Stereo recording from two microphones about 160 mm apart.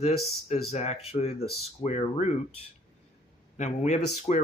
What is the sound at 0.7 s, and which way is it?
Speech, 40° left (ahead or behind).